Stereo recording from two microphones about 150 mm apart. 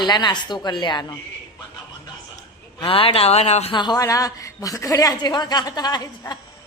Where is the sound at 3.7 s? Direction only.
30° left (ahead or behind).